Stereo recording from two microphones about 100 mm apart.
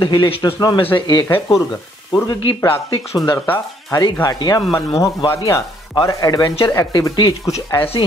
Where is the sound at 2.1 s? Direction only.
45° left (ahead or behind).